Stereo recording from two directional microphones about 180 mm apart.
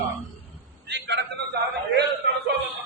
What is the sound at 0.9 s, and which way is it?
Speech, 75° right (ahead or behind).